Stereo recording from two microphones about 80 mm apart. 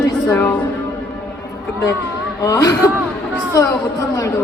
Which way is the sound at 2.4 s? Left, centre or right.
Left.